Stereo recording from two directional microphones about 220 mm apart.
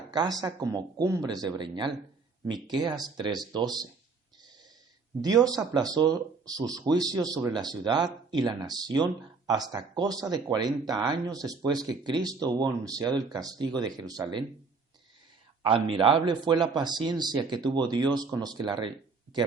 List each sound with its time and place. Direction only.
0.1 s speech: 20° right (ahead or behind)
5.2 s speech: 15° right (ahead or behind)
15.6 s speech: 25° right (ahead or behind)